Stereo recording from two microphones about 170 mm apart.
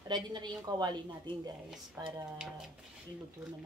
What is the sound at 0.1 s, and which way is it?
A woman's voice, 25° right (ahead or behind).